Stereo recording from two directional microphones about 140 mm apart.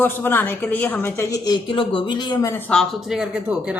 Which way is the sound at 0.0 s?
15° left (ahead or behind).